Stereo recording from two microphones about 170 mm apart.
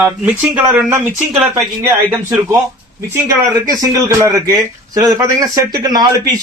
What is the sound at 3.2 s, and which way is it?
Speech, 20° right (ahead or behind).